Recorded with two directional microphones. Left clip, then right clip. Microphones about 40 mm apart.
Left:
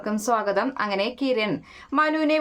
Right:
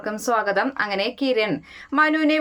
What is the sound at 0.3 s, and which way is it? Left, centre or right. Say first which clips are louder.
Speech: right 2 dB; centre.